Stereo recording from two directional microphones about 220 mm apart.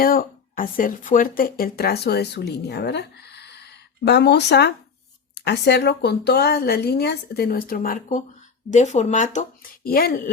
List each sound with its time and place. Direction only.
0.0 s speech: 40° left (ahead or behind)